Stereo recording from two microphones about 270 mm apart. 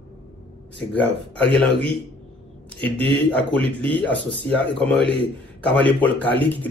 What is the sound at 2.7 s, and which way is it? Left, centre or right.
Speech, centre.